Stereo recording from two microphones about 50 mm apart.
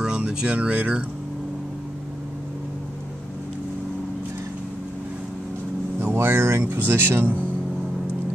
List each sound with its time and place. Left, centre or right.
0.0 s speech: centre
5.9 s vehicle: right
6.8 s speech: right